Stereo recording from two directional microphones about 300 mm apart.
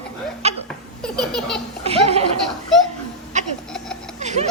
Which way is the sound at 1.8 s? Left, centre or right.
Centre.